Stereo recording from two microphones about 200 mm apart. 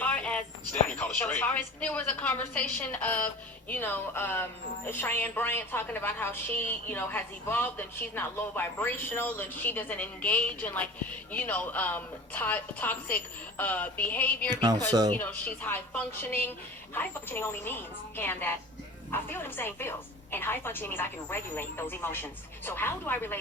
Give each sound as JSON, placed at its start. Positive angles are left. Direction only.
{"t": 0.0, "sound": "a sound", "side_deg": 5}
{"t": 0.7, "sound": "a woman's voice", "side_deg": 10}
{"t": 14.5, "sound": "speech", "side_deg": -20}
{"t": 15.1, "sound": "a woman's voice", "side_deg": 10}